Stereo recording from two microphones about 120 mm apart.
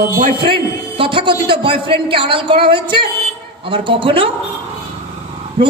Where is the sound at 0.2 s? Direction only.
45° right (ahead or behind).